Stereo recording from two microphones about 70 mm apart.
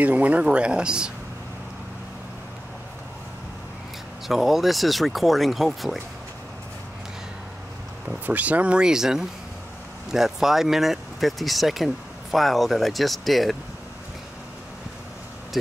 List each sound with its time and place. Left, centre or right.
0.0 s speech: right
4.3 s speech: centre
8.3 s speech: right; by 13.6 s centre
15.5 s speech: centre